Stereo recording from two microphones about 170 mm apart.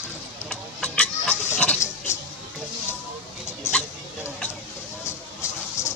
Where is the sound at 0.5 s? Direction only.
5° left (ahead or behind).